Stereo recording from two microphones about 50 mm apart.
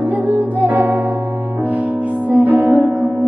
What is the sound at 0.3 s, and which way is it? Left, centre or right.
Music, right.